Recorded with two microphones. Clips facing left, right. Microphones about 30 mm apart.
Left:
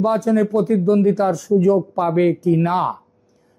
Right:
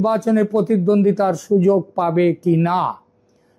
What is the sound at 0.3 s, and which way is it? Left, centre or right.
Speech, centre.